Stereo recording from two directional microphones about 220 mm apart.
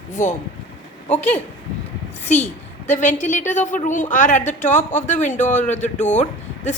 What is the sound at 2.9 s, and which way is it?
Speech, 35° left (ahead or behind).